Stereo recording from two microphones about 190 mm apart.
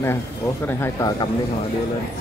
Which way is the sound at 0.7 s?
15° left (ahead or behind).